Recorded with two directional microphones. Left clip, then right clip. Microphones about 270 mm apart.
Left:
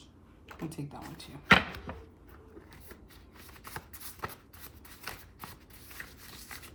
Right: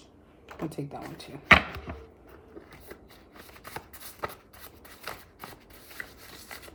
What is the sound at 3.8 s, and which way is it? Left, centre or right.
Shuffling cards, centre.